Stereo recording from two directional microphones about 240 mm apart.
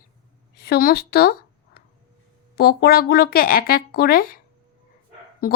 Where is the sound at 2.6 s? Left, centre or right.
Left.